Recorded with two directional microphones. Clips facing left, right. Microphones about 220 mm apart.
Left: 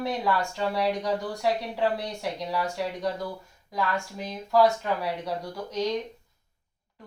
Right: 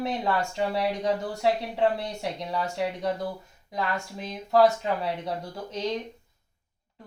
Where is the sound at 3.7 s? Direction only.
20° right (ahead or behind).